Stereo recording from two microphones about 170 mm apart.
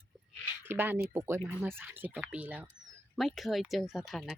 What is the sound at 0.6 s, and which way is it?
Speech, 10° right (ahead or behind).